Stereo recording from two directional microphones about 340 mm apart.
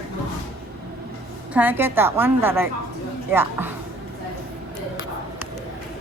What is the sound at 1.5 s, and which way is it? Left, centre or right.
A woman's voice, centre.